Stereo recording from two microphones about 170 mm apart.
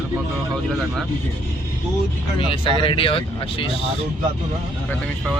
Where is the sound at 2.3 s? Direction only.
30° left (ahead or behind).